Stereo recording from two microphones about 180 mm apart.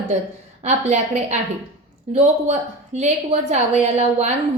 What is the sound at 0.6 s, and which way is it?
Speech, 40° right (ahead or behind).